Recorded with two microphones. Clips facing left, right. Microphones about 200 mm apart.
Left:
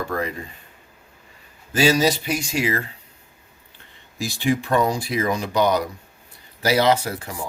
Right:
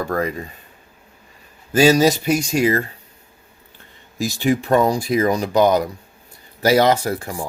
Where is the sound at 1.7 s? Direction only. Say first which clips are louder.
Right 5 dB; 45° right (ahead or behind).